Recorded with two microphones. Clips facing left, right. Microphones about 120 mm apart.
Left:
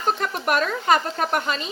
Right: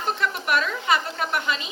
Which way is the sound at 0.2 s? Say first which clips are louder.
Left 2 dB; 45° left (ahead or behind).